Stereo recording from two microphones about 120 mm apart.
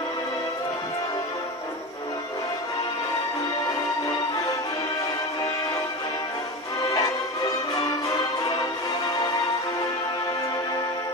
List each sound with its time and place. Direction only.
6.8 s music: 30° left (ahead or behind)